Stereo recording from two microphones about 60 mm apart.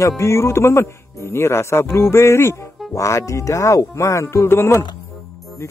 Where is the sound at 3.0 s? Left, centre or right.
Left.